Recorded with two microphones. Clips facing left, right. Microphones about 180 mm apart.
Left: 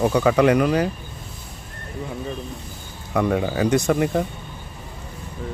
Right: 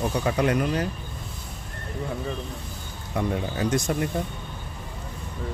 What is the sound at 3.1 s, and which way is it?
Speech, 85° left.